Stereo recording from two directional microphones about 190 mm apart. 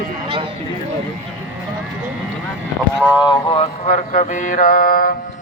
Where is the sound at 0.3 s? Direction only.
30° right (ahead or behind).